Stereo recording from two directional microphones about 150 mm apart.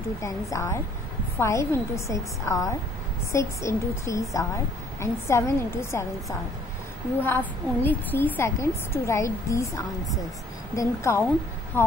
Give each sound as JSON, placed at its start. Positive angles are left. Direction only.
{"t": 0.2, "sound": "a woman's voice", "side_deg": 20}